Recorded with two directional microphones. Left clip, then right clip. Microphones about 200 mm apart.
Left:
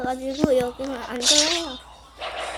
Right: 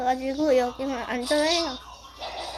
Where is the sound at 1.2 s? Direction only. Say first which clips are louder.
Left 6 dB; 55° left (ahead or behind).